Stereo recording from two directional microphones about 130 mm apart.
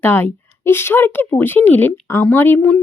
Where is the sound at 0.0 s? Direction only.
15° left (ahead or behind).